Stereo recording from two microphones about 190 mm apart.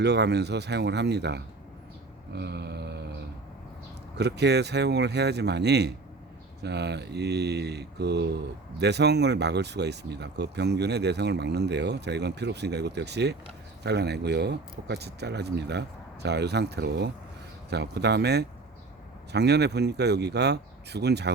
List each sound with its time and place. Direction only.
0.0 s speech: 60° right (ahead or behind)
2.3 s a sound: 60° right (ahead or behind)
4.2 s speech: 60° right (ahead or behind)